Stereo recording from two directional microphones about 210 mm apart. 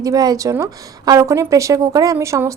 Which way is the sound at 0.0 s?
15° right (ahead or behind).